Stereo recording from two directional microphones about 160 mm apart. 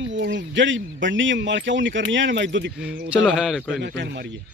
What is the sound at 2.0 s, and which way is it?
Speech, 90° right.